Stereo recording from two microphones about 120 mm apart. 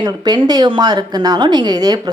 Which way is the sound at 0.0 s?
35° right (ahead or behind).